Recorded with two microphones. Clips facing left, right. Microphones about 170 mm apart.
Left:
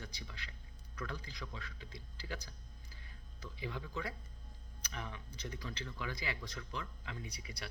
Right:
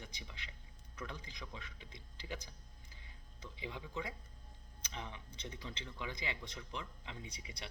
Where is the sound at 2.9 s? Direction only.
20° right (ahead or behind).